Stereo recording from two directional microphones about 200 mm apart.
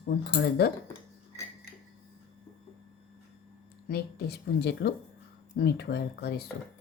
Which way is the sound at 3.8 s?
55° left (ahead or behind).